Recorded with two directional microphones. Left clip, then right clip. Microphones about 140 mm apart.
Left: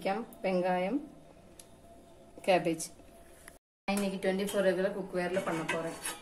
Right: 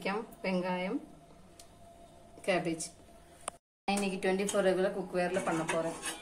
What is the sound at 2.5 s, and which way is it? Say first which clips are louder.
Speech: left 4 dB; 25° left (ahead or behind).